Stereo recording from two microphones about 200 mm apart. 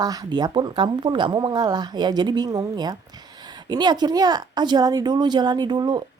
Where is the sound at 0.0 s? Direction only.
20° right (ahead or behind).